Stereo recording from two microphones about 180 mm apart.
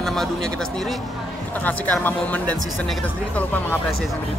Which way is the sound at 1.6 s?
10° left (ahead or behind).